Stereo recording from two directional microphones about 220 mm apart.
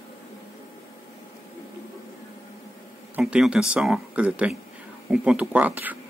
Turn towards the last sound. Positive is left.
turn(degrees=-5)  # may be behind; listen again after turning